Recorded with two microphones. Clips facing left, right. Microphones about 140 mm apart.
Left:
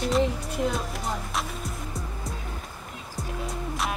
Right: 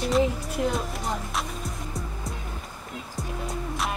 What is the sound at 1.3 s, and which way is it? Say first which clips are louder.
Music: even; centre (ahead or behind).